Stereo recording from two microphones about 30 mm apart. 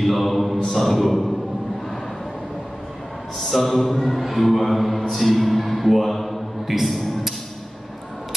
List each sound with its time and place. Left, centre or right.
0.0 s mantra: centre
3.4 s mantra: centre
6.7 s a man's voice: centre